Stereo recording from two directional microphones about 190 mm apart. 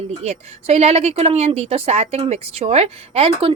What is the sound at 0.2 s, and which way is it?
Speech, 35° right (ahead or behind).